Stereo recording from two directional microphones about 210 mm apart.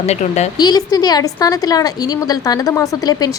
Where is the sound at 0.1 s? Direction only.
30° left (ahead or behind).